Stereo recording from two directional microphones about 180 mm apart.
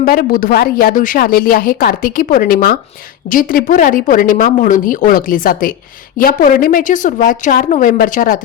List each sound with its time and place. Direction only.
0.0 s a woman's voice: 55° left (ahead or behind)